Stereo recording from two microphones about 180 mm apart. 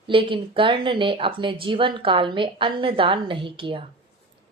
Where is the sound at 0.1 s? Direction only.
30° right (ahead or behind).